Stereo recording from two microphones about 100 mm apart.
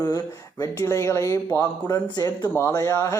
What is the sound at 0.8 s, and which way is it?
Speech, 30° left (ahead or behind).